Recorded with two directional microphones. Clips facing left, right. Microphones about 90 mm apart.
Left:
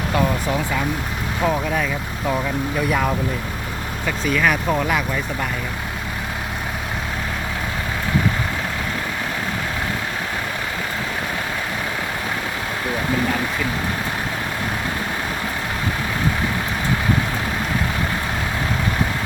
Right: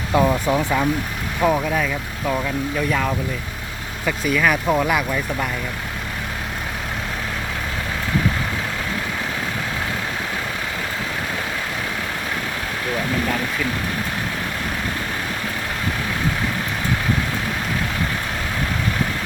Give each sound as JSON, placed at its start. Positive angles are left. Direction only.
{"t": 0.1, "sound": "speech", "side_deg": -15}
{"t": 1.4, "sound": "speech", "side_deg": -5}
{"t": 4.0, "sound": "speech", "side_deg": -5}